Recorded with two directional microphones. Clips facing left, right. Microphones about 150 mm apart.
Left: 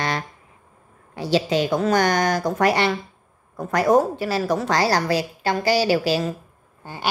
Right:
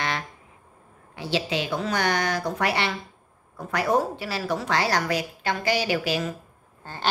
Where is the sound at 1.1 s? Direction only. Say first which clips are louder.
Left 6 dB; 40° left (ahead or behind).